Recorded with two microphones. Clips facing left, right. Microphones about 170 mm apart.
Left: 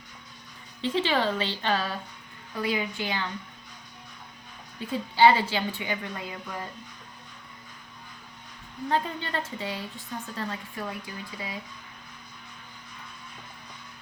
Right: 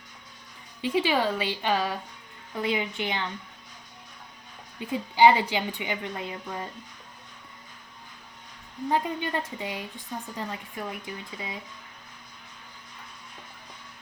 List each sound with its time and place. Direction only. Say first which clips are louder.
0.8 s a woman's voice: right 1 dB; 10° right (ahead or behind)
4.8 s a woman's voice: right 1 dB; 15° right (ahead or behind)
8.9 s a woman's voice: right 2 dB; 15° right (ahead or behind)